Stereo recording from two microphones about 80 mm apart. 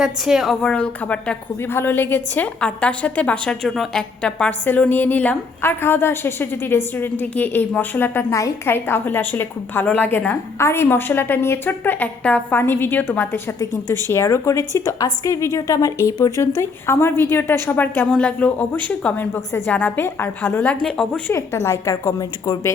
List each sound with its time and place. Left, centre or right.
0.0 s a woman's voice: centre
0.6 s a woman's voice: centre
1.7 s a woman's voice: left
5.6 s a woman's voice: left
16.6 s a woman's voice: left
20.8 s a woman's voice: centre
21.3 s a woman's voice: left